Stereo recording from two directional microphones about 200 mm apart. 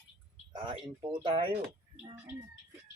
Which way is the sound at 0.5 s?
25° right (ahead or behind).